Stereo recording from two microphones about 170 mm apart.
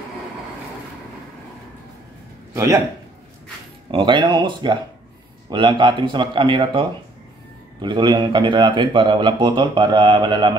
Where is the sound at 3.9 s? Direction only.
30° right (ahead or behind).